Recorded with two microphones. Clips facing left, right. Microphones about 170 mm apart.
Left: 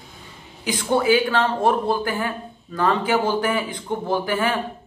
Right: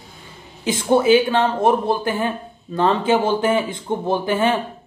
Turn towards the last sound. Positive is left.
turn(degrees=-25)  # may be behind; listen again after turning